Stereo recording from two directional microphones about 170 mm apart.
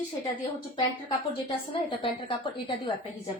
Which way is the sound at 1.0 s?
30° left (ahead or behind).